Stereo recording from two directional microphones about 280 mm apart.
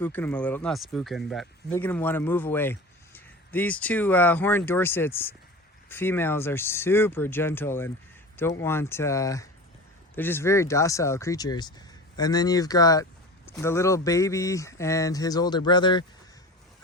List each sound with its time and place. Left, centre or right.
0.0 s speech: centre